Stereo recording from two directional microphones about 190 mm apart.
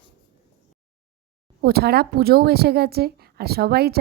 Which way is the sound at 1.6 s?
55° right (ahead or behind).